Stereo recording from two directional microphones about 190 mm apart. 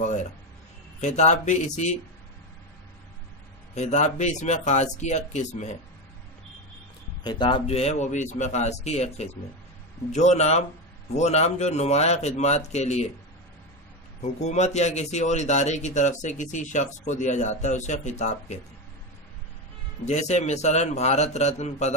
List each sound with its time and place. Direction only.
1.0 s speech: 40° left (ahead or behind)
3.7 s speech: 35° left (ahead or behind)
7.2 s speech: 25° left (ahead or behind)
14.2 s speech: 35° left (ahead or behind)
20.1 s speech: 35° left (ahead or behind)